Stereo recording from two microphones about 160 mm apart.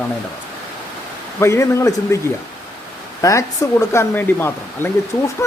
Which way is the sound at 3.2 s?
20° left (ahead or behind).